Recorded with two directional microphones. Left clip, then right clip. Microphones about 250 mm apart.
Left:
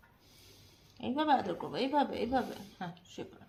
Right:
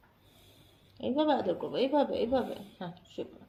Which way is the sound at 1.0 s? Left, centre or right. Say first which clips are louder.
Right 1 dB; left.